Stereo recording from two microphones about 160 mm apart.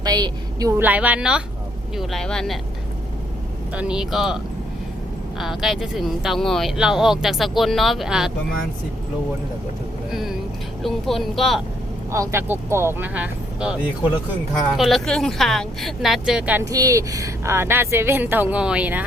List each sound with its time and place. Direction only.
0.0 s a sound: 25° right (ahead or behind)
0.8 s a woman's voice: 10° right (ahead or behind)
3.8 s speech: 5° right (ahead or behind)
5.4 s speech: centre (ahead or behind)
10.1 s speech: centre (ahead or behind)
12.1 s a woman's voice: 15° right (ahead or behind)
16.6 s a woman's voice: 20° right (ahead or behind)